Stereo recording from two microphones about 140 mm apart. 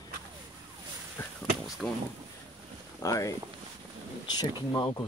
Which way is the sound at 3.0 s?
25° left (ahead or behind).